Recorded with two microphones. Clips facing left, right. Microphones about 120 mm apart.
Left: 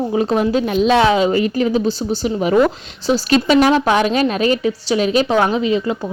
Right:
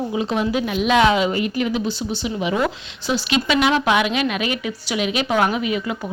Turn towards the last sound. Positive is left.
turn(degrees=30)  # may be behind; listen again after turning